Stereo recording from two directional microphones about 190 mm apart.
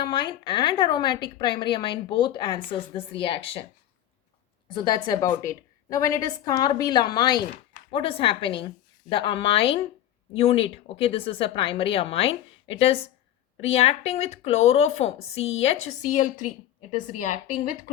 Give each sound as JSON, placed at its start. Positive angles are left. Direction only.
{"t": 0.0, "sound": "a woman's voice", "side_deg": 25}
{"t": 4.7, "sound": "a woman's voice", "side_deg": 25}